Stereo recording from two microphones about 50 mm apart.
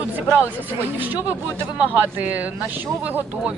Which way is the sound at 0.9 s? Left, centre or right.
Right.